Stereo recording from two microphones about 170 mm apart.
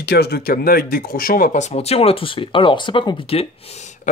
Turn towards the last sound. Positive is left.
turn(degrees=30)  # may be behind; listen again after turning